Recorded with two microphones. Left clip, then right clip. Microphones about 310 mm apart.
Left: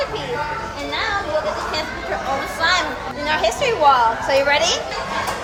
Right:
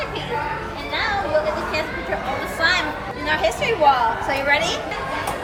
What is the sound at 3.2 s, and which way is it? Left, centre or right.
A woman's voice, centre.